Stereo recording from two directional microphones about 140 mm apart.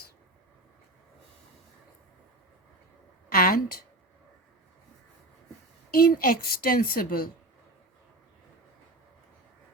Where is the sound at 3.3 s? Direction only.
90° left.